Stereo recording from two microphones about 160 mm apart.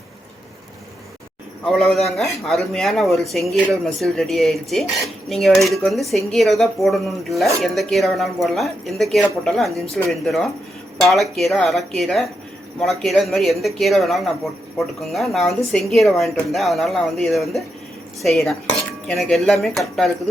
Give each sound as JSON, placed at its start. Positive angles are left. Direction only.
{"t": 1.6, "sound": "speech", "side_deg": 0}